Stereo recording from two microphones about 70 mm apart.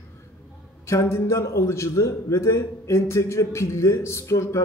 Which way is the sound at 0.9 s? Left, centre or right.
Left.